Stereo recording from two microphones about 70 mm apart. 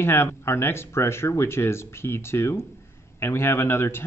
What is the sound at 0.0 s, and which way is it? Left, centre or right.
Speech, left.